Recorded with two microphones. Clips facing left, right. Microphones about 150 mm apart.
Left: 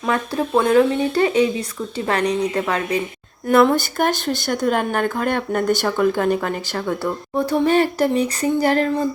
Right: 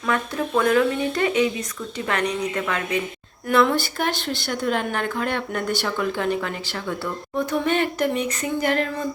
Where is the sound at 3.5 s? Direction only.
45° left (ahead or behind).